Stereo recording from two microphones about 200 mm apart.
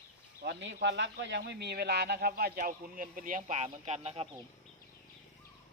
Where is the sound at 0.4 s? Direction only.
60° right (ahead or behind); by 4.3 s 30° right (ahead or behind).